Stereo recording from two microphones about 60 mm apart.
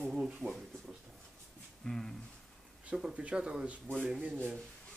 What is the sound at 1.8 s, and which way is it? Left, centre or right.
Speech, centre.